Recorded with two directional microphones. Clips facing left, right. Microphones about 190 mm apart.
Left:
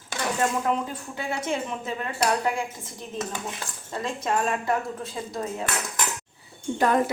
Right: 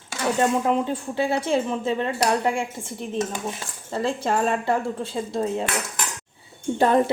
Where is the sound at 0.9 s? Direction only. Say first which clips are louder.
Right 8 dB; 30° right (ahead or behind).